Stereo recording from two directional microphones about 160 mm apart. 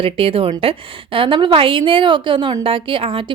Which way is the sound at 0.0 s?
35° right (ahead or behind).